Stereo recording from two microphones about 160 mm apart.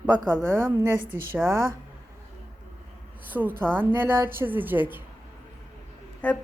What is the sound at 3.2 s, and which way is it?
A woman's voice, 10° right (ahead or behind).